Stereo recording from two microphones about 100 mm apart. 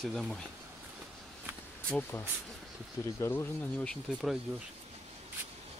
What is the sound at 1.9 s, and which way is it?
Speech, 20° left (ahead or behind).